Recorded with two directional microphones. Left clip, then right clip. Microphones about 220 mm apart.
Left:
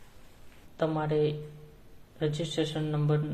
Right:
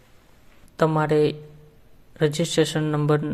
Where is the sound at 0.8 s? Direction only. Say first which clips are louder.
Right 8 dB; 30° right (ahead or behind).